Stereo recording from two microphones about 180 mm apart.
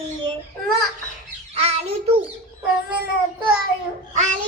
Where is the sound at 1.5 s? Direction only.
35° right (ahead or behind).